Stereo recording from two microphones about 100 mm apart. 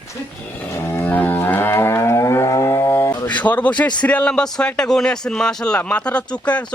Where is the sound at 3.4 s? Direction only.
15° left (ahead or behind).